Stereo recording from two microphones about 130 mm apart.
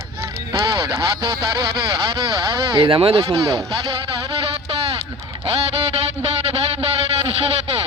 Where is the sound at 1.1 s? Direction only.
30° right (ahead or behind).